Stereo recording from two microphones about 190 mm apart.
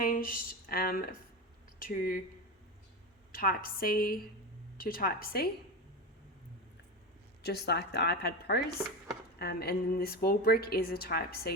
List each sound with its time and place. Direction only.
0.0 s a woman's voice: 50° left (ahead or behind)
3.3 s a woman's voice: 50° left (ahead or behind)
7.4 s a woman's voice: 55° left (ahead or behind)